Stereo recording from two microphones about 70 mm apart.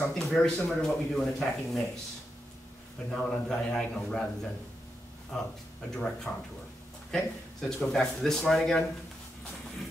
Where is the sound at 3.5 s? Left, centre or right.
Centre.